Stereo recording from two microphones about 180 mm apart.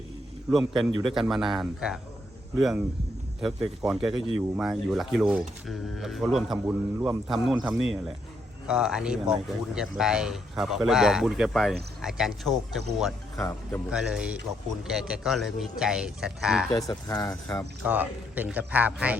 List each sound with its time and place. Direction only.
0.5 s speech: centre (ahead or behind)
3.8 s speech: centre (ahead or behind)
16.7 s speech: 20° left (ahead or behind)
17.8 s speech: 10° right (ahead or behind)